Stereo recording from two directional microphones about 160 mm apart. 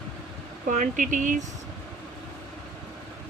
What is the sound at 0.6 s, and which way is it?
Speech, 55° right (ahead or behind).